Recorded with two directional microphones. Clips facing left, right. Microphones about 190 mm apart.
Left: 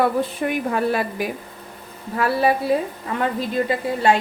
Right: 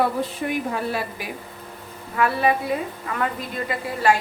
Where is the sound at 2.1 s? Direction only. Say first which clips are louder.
Left 2 dB; 35° left (ahead or behind).